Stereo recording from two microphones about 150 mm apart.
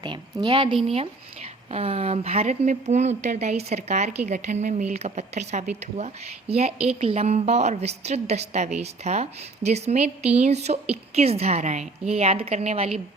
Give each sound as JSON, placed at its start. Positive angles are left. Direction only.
{"t": 0.0, "sound": "a woman's voice", "side_deg": -30}